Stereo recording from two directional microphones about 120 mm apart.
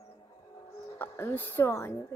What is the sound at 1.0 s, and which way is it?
Speech, 15° left (ahead or behind).